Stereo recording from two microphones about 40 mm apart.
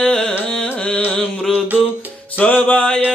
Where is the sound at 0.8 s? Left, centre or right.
Left.